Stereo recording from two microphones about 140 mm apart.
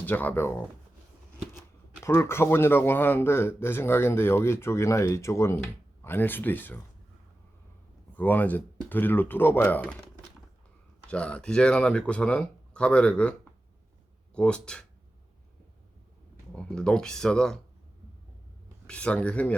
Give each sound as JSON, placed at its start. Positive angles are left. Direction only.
{"t": 0.0, "sound": "a man's voice", "side_deg": 10}
{"t": 2.0, "sound": "a man's voice", "side_deg": 20}
{"t": 8.1, "sound": "a man's voice", "side_deg": 10}
{"t": 11.1, "sound": "a man's voice", "side_deg": 10}
{"t": 14.3, "sound": "a man's voice", "side_deg": 5}
{"t": 16.6, "sound": "speech", "side_deg": 5}
{"t": 18.9, "sound": "a man's voice", "side_deg": 10}